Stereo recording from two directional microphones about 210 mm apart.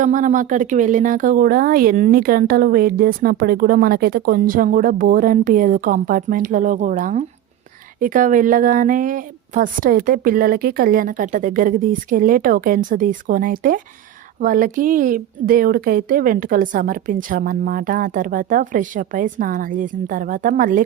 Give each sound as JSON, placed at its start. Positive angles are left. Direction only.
{"t": 0.0, "sound": "speech", "side_deg": -35}